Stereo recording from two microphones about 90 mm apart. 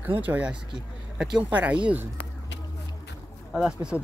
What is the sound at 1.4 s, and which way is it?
Speech, 15° right (ahead or behind).